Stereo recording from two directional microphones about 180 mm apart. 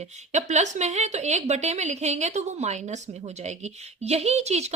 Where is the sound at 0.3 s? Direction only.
40° right (ahead or behind).